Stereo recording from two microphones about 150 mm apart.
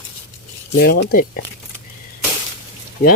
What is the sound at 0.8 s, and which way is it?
Speech, 75° left (ahead or behind).